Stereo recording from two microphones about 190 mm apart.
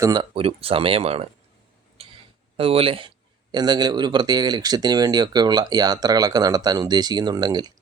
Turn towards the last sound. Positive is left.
turn(degrees=-20)  # may be behind; listen again after turning